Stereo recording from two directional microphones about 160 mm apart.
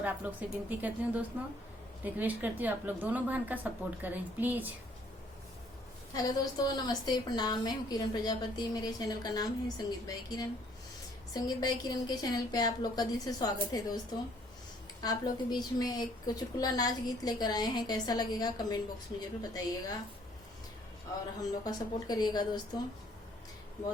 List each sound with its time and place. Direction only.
0.0 s a woman's voice: 10° right (ahead or behind)
6.1 s a woman's voice: 25° left (ahead or behind)
21.6 s a woman's voice: 25° left (ahead or behind)